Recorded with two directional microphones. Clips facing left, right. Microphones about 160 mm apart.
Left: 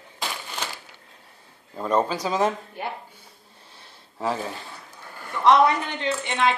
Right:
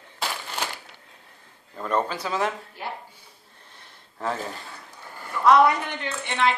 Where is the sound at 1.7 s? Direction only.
15° left (ahead or behind).